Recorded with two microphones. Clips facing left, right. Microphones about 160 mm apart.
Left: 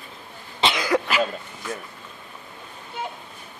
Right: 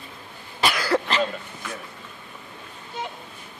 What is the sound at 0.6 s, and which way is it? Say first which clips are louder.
Cough: left 1 dB; 20° left (ahead or behind).